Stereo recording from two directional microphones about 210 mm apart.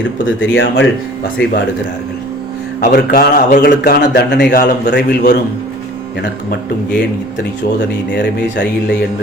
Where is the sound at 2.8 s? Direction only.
45° left (ahead or behind).